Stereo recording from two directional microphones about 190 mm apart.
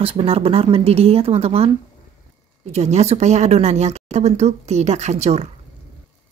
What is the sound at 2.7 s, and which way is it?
A woman's voice, 35° right (ahead or behind).